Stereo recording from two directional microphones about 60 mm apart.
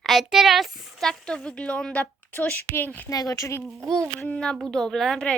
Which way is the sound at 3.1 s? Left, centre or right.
Left.